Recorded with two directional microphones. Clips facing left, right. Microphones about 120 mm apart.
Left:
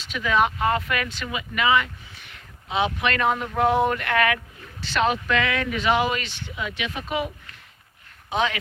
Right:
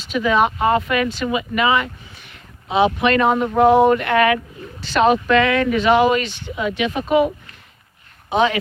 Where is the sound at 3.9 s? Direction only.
15° right (ahead or behind).